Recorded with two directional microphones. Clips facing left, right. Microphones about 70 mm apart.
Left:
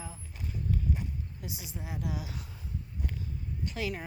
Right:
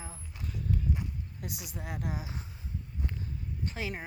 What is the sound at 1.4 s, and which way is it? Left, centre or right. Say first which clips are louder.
Speech: even; right.